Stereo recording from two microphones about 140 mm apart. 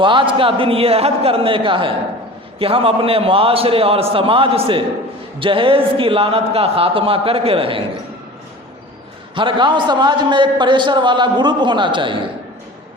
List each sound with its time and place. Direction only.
0.0 s a man's voice: 35° right (ahead or behind)
9.3 s a man's voice: 35° right (ahead or behind)